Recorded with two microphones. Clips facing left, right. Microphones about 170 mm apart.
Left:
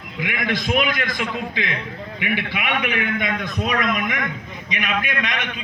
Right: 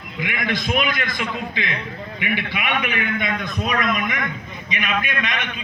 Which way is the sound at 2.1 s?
90° left.